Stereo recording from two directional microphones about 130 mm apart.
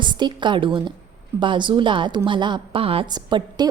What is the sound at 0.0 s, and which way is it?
A woman's voice, 35° right (ahead or behind).